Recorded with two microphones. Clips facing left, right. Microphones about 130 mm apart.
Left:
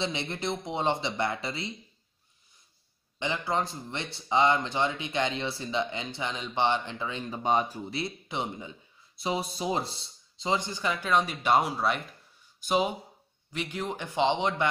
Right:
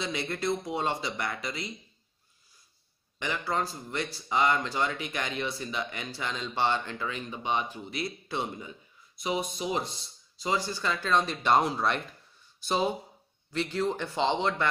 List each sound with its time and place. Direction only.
0.0 s speech: 25° left (ahead or behind)
3.2 s speech: 20° left (ahead or behind)
7.4 s speech: 40° left (ahead or behind)
8.3 s a man's voice: 20° left (ahead or behind)